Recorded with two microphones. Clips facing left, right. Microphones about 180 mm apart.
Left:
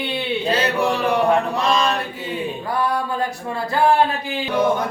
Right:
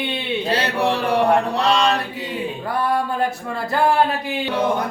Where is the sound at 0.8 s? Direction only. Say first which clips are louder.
Right 2 dB; 35° right (ahead or behind).